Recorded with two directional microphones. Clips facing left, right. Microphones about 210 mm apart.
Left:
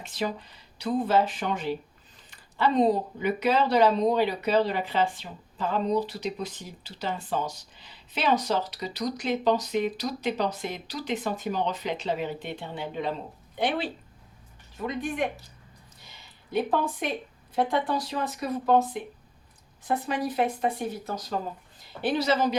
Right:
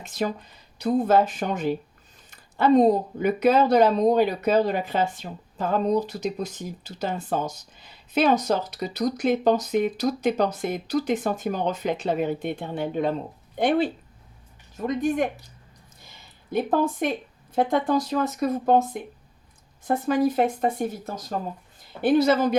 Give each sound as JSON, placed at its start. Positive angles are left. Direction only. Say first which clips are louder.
{"t": 0.2, "sound": "speech", "louder": "right 3 dB", "side_deg": -45}
{"t": 16.5, "sound": "speech", "louder": "right 3 dB", "side_deg": -45}
{"t": 19.9, "sound": "speech", "louder": "right 7 dB", "side_deg": -45}